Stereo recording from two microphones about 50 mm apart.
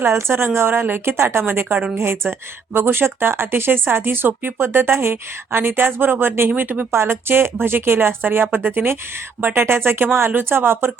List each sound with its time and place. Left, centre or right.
0.1 s a woman's voice: right
6.5 s speech: right
6.9 s speech: right